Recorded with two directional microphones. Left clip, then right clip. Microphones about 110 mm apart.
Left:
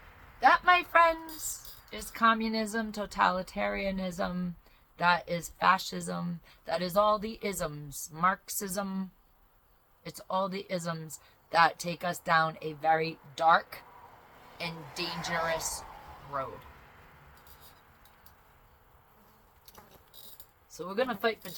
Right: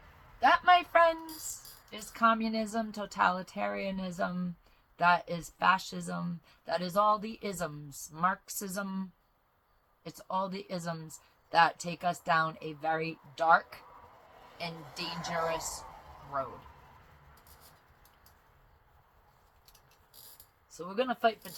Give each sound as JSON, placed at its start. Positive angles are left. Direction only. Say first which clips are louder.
{"t": 0.3, "sound": "a sound", "louder": "left 1 dB", "side_deg": 25}
{"t": 1.9, "sound": "speech", "louder": "left 1 dB", "side_deg": 25}
{"t": 20.7, "sound": "speech", "louder": "left 1 dB", "side_deg": 25}